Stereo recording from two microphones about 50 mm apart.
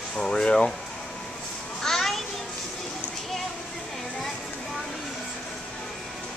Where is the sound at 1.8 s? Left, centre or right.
Centre.